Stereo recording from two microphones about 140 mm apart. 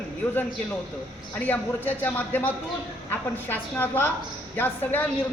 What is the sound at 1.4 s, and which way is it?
A woman's voice, 15° left (ahead or behind).